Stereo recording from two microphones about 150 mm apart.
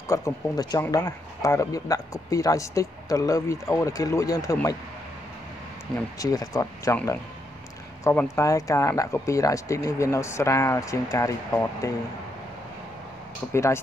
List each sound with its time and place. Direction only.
0.1 s speech: 20° left (ahead or behind)
6.1 s speech: 25° left (ahead or behind)
8.0 s speech: 15° left (ahead or behind)
13.5 s speech: 20° left (ahead or behind)